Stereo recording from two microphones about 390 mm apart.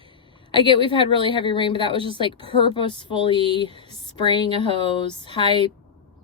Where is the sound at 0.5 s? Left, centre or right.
Centre.